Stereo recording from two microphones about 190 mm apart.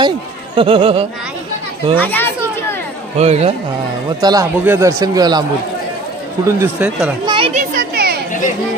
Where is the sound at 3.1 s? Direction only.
35° right (ahead or behind).